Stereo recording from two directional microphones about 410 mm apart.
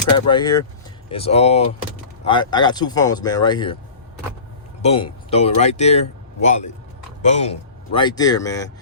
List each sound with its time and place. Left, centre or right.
0.3 s speech: centre
4.8 s a man's voice: centre